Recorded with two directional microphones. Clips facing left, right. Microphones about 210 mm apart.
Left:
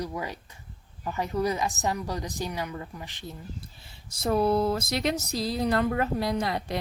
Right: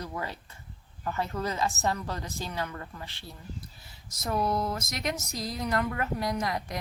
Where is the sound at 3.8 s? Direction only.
30° left (ahead or behind).